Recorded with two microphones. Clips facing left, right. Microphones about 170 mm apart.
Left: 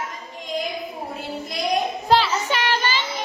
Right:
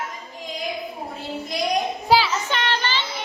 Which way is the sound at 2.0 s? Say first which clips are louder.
Even; centre (ahead or behind).